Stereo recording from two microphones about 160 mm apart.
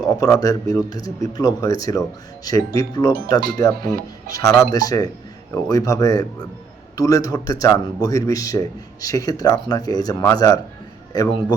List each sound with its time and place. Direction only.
0.0 s a man's voice: 20° left (ahead or behind)